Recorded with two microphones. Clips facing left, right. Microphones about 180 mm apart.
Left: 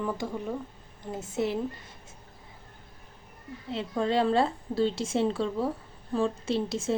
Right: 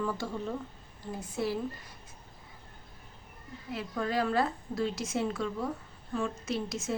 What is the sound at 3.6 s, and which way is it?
A woman's voice, 25° left (ahead or behind).